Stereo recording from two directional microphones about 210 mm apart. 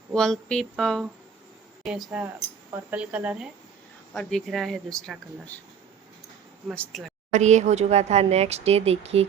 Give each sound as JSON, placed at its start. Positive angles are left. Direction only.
{"t": 0.1, "sound": "speech", "side_deg": 5}
{"t": 6.7, "sound": "speech", "side_deg": 0}
{"t": 7.3, "sound": "speech", "side_deg": -35}